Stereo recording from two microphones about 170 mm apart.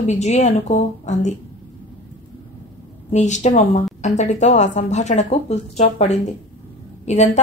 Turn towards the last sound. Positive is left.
turn(degrees=45)  # may be behind; listen again after turning